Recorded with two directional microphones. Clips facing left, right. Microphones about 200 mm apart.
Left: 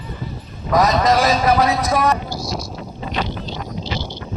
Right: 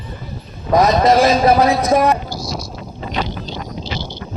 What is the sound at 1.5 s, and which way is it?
Speech, 40° right (ahead or behind).